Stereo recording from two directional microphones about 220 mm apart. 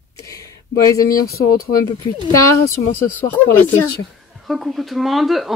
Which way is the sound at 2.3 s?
15° left (ahead or behind).